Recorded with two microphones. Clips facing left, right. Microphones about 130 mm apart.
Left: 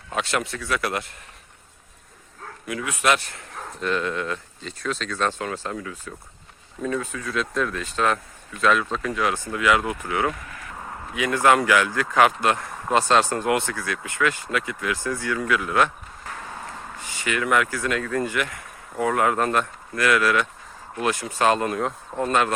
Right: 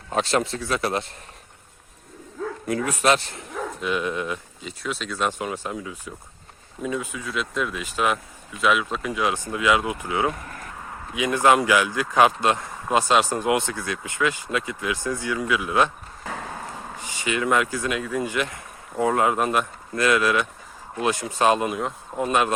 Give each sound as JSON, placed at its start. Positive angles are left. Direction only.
{"t": 0.1, "sound": "a man's voice", "side_deg": -30}
{"t": 2.6, "sound": "a man's voice", "side_deg": -40}
{"t": 3.8, "sound": "a man's voice", "side_deg": -10}
{"t": 17.0, "sound": "a man's voice", "side_deg": -20}
{"t": 21.8, "sound": "speech", "side_deg": -5}
{"t": 22.2, "sound": "speech", "side_deg": -15}